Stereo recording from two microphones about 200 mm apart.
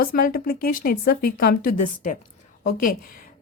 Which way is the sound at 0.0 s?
45° left (ahead or behind).